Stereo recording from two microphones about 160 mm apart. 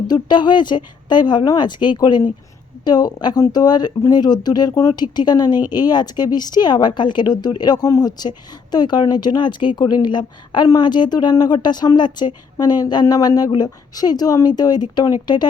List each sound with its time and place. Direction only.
0.1 s a woman's voice: 30° left (ahead or behind)